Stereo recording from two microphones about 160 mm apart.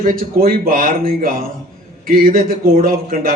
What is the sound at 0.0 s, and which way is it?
A man's voice, 65° right (ahead or behind).